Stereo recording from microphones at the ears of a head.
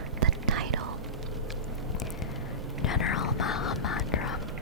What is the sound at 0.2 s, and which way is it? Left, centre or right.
Whispering, right.